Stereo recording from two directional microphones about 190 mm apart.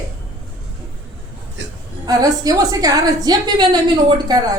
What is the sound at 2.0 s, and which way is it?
A woman's voice, 20° right (ahead or behind).